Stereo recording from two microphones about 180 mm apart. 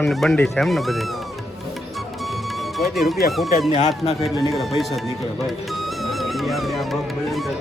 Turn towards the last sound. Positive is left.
turn(degrees=0)  # may be behind; listen again after turning